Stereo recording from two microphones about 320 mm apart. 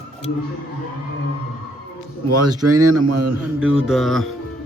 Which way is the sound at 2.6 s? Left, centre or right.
Right.